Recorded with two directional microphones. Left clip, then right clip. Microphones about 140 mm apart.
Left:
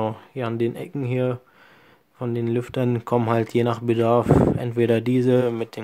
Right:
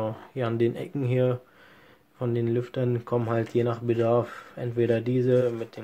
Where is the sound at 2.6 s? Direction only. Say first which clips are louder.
Left 4 dB; 45° left (ahead or behind).